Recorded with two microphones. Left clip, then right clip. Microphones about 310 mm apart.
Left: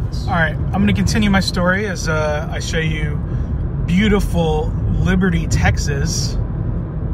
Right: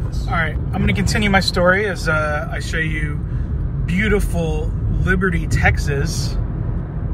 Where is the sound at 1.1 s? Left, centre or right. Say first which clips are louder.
Right 5 dB; centre.